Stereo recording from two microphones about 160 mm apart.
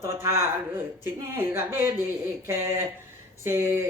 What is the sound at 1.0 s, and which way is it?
Speech, 15° right (ahead or behind).